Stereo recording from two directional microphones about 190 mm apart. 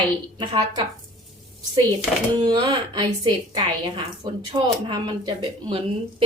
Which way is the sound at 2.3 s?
20° right (ahead or behind).